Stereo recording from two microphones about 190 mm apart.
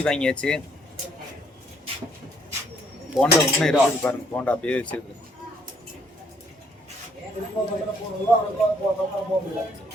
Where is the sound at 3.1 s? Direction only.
5° left (ahead or behind).